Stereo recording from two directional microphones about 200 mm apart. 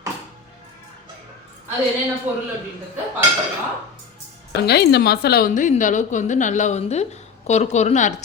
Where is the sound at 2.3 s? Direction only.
10° right (ahead or behind).